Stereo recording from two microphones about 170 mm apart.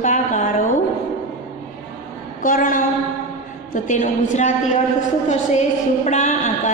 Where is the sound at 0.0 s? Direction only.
50° left (ahead or behind).